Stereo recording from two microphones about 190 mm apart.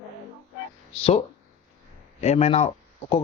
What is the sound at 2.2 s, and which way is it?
Speech, 35° left (ahead or behind).